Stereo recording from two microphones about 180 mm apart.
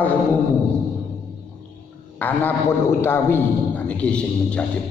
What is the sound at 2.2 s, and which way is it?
A man's voice, 10° left (ahead or behind).